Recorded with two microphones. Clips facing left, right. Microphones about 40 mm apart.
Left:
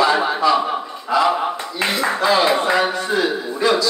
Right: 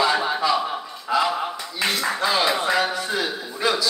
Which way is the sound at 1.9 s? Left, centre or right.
Centre.